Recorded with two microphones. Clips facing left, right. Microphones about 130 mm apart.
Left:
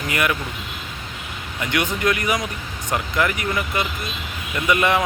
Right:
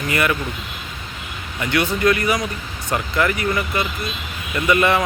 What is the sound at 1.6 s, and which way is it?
Speech, 15° left (ahead or behind).